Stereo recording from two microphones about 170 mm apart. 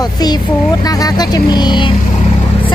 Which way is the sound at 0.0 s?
25° left (ahead or behind).